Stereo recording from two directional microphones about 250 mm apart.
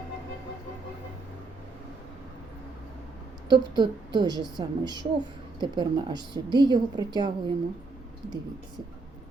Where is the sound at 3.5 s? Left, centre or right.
Centre.